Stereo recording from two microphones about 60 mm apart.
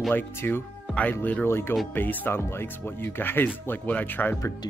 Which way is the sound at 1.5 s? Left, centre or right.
Left.